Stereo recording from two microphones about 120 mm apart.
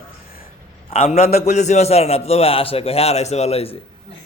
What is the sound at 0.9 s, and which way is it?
A man's voice, 60° left (ahead or behind).